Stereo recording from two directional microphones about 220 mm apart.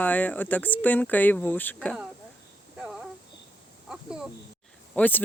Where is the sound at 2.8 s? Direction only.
5° right (ahead or behind).